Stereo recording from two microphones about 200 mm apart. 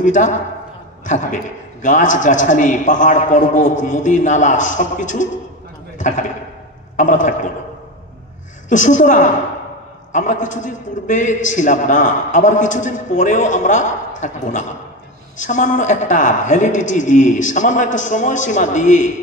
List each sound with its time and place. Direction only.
0.0 s a man's voice: 40° left (ahead or behind)
8.6 s a man's voice: 40° left (ahead or behind)